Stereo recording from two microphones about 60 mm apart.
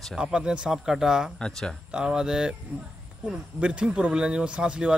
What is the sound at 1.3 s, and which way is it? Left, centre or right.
Speech, centre.